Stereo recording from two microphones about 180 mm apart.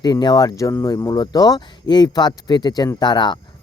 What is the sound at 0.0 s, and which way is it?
Speech, 25° left (ahead or behind).